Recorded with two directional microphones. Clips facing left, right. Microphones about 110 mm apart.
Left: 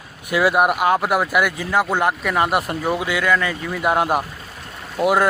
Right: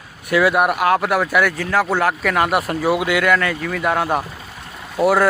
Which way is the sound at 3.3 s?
15° left (ahead or behind).